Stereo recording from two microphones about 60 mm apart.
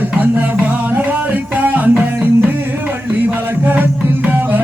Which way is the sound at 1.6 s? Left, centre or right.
Right.